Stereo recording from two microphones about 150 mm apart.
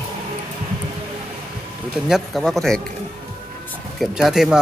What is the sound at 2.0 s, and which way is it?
Speech, centre (ahead or behind).